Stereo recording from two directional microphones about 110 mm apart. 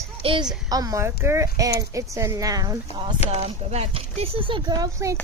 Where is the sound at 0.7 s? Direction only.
35° right (ahead or behind).